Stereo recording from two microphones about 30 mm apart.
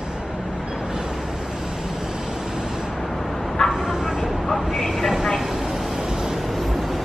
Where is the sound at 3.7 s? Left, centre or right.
Centre.